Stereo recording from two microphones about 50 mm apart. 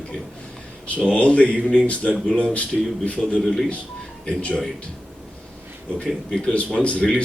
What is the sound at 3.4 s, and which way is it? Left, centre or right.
Speech, centre.